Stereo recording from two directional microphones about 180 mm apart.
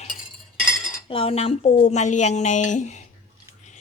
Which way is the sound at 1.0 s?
30° left (ahead or behind).